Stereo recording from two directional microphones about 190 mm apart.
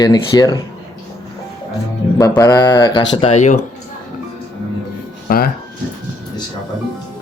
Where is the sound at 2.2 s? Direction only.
20° left (ahead or behind).